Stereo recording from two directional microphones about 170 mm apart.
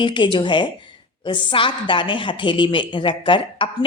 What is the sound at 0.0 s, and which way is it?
A woman's voice, 30° left (ahead or behind).